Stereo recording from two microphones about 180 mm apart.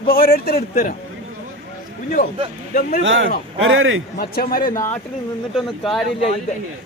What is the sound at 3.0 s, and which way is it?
A man's voice, 90° right.